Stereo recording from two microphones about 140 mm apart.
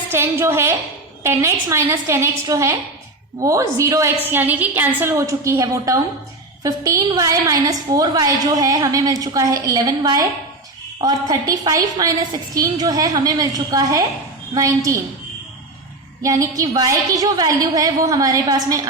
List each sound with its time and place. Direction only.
0.1 s a woman's voice: 15° right (ahead or behind)
16.2 s a woman's voice: 25° right (ahead or behind)